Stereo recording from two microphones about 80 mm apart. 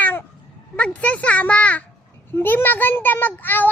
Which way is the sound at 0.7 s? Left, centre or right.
Centre.